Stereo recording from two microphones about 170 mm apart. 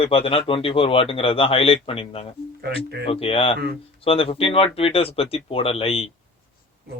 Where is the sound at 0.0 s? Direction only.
35° left (ahead or behind).